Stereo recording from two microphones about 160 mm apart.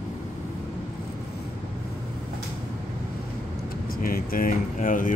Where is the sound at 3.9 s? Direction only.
65° left (ahead or behind).